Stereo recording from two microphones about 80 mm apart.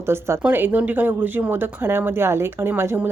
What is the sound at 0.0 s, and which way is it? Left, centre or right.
Speech, right.